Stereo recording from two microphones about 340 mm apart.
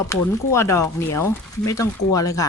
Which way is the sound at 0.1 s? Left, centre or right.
Centre.